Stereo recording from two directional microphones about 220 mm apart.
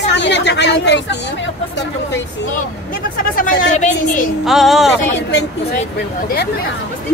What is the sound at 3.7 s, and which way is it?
Speech, 35° left (ahead or behind).